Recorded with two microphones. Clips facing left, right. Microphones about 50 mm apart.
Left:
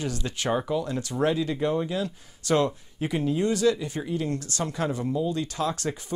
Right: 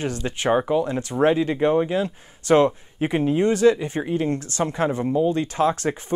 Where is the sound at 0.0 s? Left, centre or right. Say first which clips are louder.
Right 5 dB; right.